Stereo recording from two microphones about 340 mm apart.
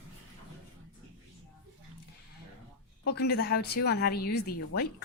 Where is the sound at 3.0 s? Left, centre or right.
Left.